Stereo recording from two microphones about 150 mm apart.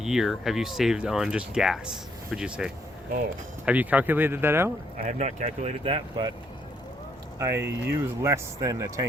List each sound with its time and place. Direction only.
0.0 s speech: 5° right (ahead or behind)
4.9 s speech: 55° right (ahead or behind)
5.8 s speech: 35° right (ahead or behind)
7.3 s speech: 15° right (ahead or behind)